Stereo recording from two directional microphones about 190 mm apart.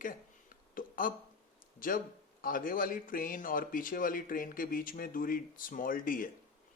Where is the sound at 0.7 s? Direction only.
45° left (ahead or behind).